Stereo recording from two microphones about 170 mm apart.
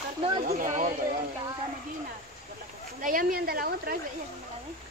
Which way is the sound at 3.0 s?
55° right (ahead or behind).